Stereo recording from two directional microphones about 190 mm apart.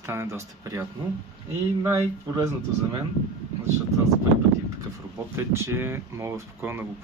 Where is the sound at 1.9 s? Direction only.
15° right (ahead or behind).